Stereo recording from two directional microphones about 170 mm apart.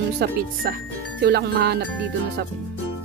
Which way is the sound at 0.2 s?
70° right (ahead or behind).